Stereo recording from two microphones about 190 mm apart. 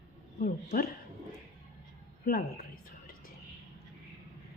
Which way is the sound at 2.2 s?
50° left (ahead or behind).